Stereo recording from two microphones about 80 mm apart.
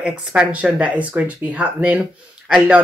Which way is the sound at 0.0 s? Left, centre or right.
Centre.